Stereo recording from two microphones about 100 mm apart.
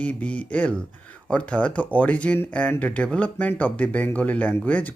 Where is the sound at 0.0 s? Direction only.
15° left (ahead or behind).